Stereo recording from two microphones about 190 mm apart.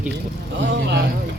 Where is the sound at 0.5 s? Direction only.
70° right (ahead or behind).